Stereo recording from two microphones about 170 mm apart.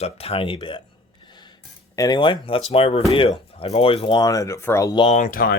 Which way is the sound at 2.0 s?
25° left (ahead or behind).